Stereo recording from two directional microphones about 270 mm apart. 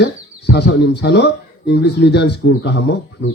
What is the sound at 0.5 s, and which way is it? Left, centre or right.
Speech, left.